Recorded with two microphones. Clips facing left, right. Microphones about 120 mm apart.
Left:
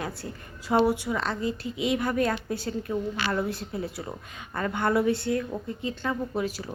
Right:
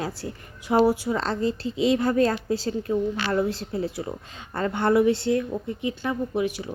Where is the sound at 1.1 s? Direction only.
35° right (ahead or behind); by 6.1 s 15° right (ahead or behind).